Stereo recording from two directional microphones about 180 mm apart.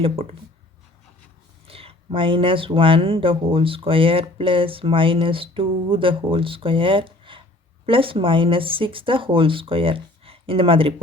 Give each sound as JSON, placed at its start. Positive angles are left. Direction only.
{"t": 1.6, "sound": "speech", "side_deg": -30}